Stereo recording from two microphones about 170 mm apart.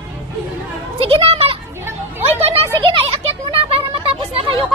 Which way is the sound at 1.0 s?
30° right (ahead or behind).